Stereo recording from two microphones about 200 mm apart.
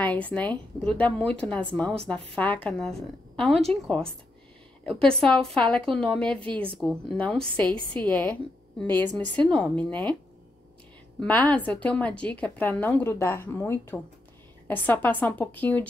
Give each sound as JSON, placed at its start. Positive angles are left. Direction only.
{"t": 0.0, "sound": "a woman's voice", "side_deg": 10}
{"t": 11.1, "sound": "a woman's voice", "side_deg": 5}